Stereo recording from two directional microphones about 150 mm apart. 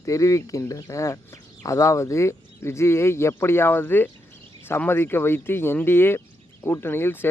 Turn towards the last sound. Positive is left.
turn(degrees=15)  # may be behind; listen again after turning